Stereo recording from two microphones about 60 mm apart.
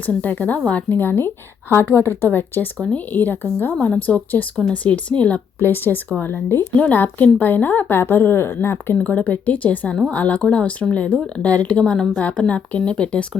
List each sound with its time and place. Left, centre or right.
0.0 s a woman's voice: left
5.5 s a woman's voice: left
9.0 s speech: left